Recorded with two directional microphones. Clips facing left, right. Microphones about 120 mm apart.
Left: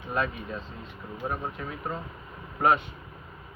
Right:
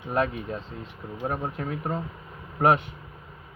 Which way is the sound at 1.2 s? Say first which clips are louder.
Right 3 dB; 25° right (ahead or behind).